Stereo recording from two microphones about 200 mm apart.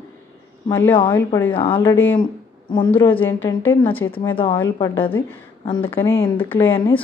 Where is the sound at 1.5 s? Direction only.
25° left (ahead or behind).